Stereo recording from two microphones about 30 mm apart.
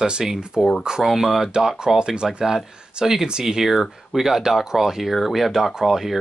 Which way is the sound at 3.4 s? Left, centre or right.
Centre.